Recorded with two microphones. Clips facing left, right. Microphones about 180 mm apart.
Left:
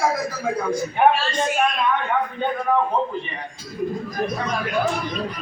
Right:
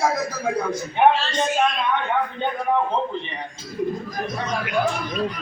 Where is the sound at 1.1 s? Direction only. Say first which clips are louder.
Even; 20° right (ahead or behind).